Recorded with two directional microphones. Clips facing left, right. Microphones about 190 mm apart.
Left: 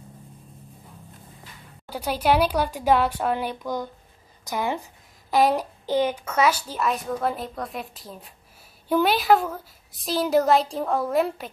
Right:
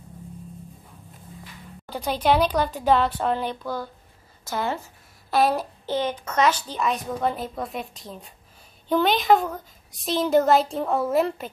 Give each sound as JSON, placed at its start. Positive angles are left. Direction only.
{"t": 1.9, "sound": "a child's voice", "side_deg": 10}